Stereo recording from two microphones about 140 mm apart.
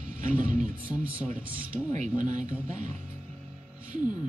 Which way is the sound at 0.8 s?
10° right (ahead or behind).